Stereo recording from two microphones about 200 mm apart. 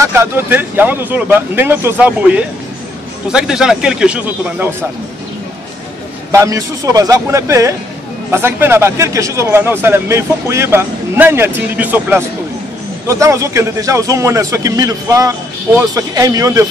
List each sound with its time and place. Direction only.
0.0 s a man's voice: 10° right (ahead or behind)
6.3 s a man's voice: 15° right (ahead or behind)